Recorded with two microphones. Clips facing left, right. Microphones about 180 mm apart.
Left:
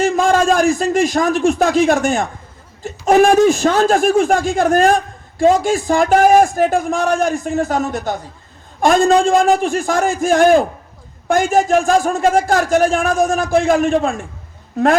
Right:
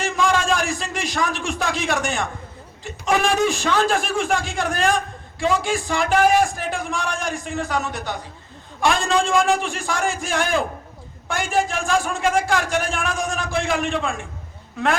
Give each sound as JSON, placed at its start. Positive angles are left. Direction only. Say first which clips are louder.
{"t": 0.0, "sound": "a man's voice", "louder": "left 7 dB", "side_deg": 40}